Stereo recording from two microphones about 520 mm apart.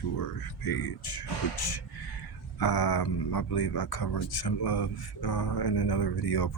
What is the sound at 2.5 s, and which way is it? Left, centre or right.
Speech, left.